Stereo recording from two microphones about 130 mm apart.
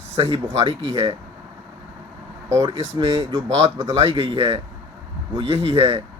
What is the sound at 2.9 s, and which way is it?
Speech, 40° right (ahead or behind).